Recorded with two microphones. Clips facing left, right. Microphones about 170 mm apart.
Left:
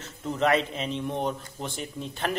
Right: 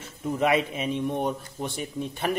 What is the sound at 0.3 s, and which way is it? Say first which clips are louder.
Speech: right 1 dB; 10° right (ahead or behind).